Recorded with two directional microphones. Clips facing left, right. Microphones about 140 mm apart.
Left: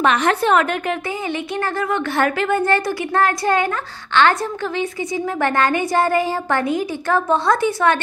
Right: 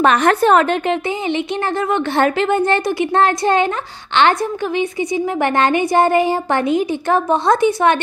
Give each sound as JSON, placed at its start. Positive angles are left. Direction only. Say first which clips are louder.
{"t": 0.0, "sound": "a woman's voice", "louder": "right 4 dB", "side_deg": -45}